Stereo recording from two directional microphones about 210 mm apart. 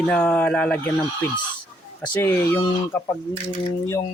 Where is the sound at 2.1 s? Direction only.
10° left (ahead or behind).